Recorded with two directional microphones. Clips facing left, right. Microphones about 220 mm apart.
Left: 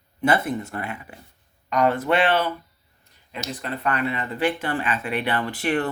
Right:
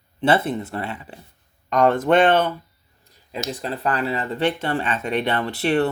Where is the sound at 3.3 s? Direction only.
35° right (ahead or behind).